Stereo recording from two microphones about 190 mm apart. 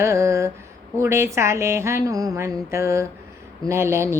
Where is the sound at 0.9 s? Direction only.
15° right (ahead or behind).